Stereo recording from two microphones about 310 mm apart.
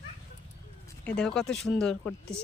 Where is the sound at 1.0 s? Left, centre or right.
Centre.